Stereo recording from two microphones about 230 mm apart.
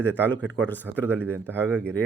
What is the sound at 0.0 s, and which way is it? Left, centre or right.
A man's voice, centre.